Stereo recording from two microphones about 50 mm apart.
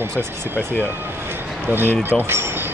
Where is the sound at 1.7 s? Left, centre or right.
Right.